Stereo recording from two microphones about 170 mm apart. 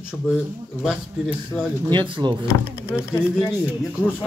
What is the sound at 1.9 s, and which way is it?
Speech, 25° right (ahead or behind).